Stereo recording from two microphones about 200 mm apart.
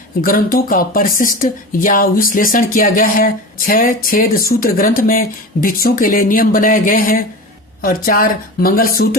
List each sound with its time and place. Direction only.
0.2 s speech: 45° left (ahead or behind)